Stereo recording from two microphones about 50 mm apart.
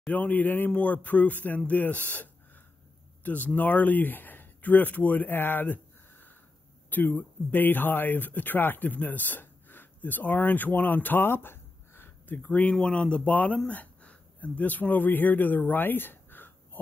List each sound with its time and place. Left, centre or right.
0.1 s speech: left
3.3 s speech: left
6.9 s speech: left
12.8 s speech: left
13.3 s speech: left